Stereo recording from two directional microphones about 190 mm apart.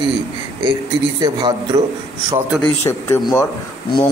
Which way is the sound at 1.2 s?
20° right (ahead or behind).